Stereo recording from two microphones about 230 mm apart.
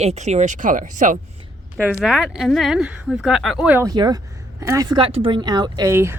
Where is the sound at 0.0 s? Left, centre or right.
Right.